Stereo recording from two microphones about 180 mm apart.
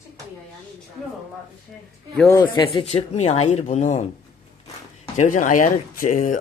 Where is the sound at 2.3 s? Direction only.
25° left (ahead or behind); by 6.4 s 45° left (ahead or behind).